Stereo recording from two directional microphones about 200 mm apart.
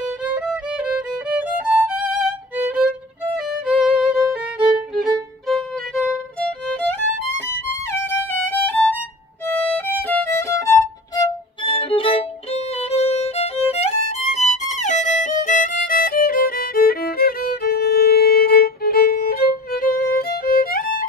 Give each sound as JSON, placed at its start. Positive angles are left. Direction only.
{"t": 0.0, "sound": "music", "side_deg": -5}
{"t": 3.4, "sound": "violin", "side_deg": -5}
{"t": 8.0, "sound": "violin", "side_deg": 10}
{"t": 11.1, "sound": "violin", "side_deg": 25}